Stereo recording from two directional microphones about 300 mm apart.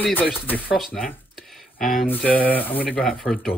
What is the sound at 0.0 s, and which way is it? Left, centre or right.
Speech, centre.